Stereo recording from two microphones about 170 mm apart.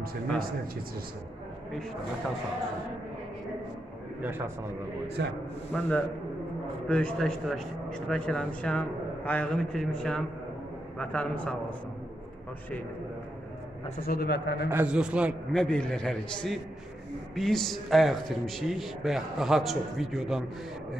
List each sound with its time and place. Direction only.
5.2 s a man's voice: 80° right
5.7 s a man's voice: 10° left (ahead or behind)
14.0 s a man's voice: 70° left (ahead or behind)
14.7 s a man's voice: 10° right (ahead or behind)
15.6 s a man's voice: 5° left (ahead or behind)